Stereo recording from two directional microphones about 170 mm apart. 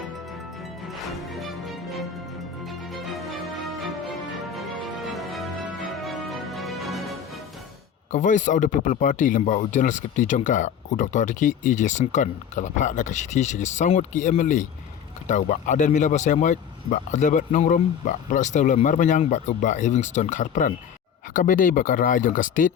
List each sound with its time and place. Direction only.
0.9 s music: centre (ahead or behind)
5.1 s music: centre (ahead or behind)
8.1 s speech: 45° left (ahead or behind)